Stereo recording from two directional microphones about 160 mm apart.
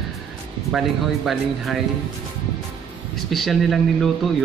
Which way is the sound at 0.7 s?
Centre (ahead or behind).